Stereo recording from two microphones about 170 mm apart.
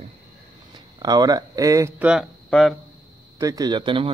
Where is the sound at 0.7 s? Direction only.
25° right (ahead or behind).